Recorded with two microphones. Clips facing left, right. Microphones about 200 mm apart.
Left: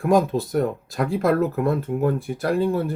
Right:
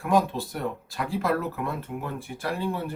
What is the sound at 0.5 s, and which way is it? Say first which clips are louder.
Speech: left 9 dB; 45° left (ahead or behind).